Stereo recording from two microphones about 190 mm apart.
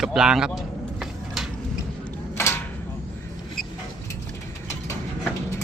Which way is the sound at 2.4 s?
15° left (ahead or behind).